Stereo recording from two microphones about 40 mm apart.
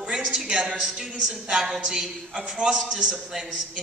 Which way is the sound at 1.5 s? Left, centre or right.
Centre.